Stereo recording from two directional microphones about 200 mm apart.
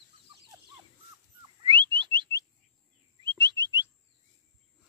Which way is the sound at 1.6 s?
25° right (ahead or behind).